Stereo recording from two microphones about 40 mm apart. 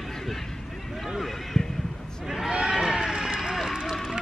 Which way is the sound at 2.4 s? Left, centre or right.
Right.